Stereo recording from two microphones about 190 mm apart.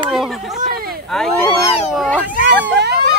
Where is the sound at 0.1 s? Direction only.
Centre (ahead or behind).